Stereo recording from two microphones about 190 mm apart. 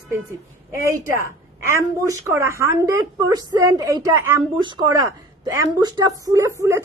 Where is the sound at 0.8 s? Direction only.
15° right (ahead or behind).